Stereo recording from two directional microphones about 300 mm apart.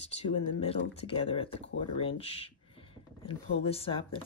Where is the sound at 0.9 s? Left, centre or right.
Centre.